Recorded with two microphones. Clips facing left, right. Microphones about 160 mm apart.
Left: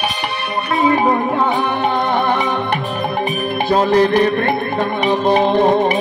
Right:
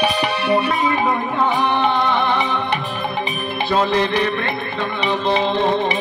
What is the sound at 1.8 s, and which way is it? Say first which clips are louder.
Music: left 1 dB; 45° left (ahead or behind).